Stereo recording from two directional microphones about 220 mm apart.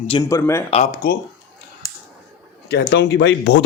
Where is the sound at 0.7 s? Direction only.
35° left (ahead or behind).